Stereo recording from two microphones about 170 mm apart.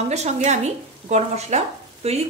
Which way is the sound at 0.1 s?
40° right (ahead or behind).